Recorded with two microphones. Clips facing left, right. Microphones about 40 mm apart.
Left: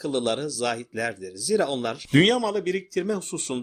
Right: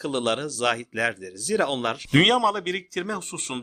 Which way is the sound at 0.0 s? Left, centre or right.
Right.